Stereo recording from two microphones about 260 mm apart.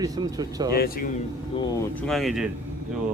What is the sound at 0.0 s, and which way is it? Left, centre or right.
Speech, centre.